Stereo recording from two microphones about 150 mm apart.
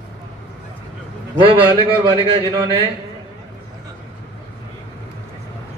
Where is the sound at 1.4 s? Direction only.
35° right (ahead or behind).